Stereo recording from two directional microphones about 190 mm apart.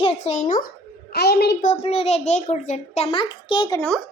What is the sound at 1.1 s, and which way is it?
Speech, 60° left (ahead or behind).